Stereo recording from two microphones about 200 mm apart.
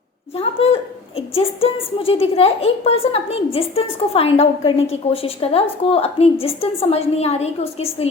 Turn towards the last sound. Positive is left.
turn(degrees=30)  # may be behind; listen again after turning